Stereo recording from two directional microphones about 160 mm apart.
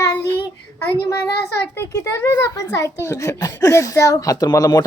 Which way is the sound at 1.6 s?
15° left (ahead or behind).